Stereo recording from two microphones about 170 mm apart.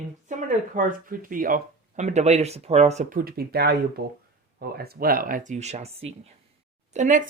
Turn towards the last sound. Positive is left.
turn(degrees=-50)  # may be behind; listen again after turning